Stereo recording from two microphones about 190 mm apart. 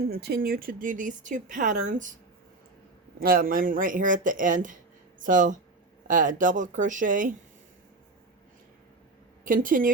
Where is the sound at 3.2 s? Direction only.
50° right (ahead or behind).